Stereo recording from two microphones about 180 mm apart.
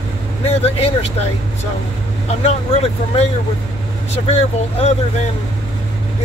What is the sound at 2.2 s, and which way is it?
Speech, 35° left (ahead or behind).